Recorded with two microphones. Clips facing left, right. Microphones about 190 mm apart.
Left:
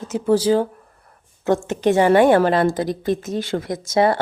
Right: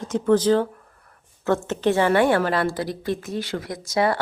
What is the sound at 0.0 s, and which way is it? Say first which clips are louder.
A woman's voice: left 1 dB; 10° left (ahead or behind).